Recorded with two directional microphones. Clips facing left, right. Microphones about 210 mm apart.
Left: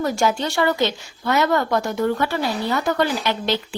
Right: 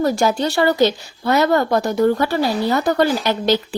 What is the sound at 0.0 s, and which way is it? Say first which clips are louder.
A woman's voice: right 4 dB; 35° right (ahead or behind).